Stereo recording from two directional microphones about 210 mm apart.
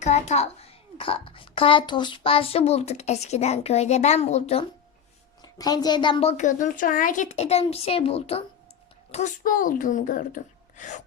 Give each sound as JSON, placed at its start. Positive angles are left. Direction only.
{"t": 0.0, "sound": "a child's voice", "side_deg": 30}
{"t": 5.4, "sound": "a child's voice", "side_deg": 20}
{"t": 9.1, "sound": "speech", "side_deg": 40}